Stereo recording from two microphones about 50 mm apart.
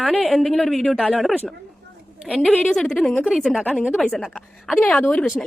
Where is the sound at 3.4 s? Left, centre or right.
Centre.